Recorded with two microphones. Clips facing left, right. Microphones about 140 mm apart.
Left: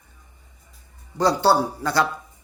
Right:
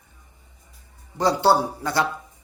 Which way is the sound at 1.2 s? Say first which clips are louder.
Even; 20° right (ahead or behind).